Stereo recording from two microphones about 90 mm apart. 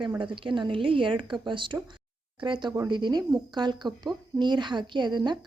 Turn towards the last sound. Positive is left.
turn(degrees=-55)  # may be behind; listen again after turning